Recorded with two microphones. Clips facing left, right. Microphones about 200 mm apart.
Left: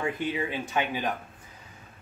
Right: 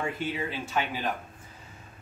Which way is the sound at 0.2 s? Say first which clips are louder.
Left 2 dB; 15° left (ahead or behind).